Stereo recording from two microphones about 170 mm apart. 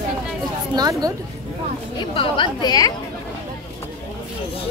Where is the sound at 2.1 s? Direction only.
25° left (ahead or behind).